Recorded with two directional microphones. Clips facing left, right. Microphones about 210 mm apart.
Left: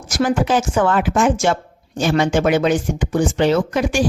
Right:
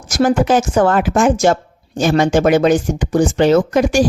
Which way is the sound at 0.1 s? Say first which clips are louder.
Right 4 dB; 45° right (ahead or behind).